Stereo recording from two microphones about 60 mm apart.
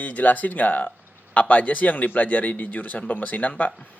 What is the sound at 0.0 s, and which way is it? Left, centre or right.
Speech, left.